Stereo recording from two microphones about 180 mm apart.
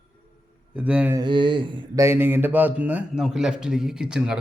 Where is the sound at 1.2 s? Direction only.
25° right (ahead or behind).